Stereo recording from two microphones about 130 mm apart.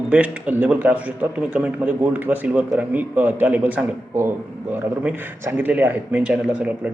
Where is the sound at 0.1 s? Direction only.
10° right (ahead or behind).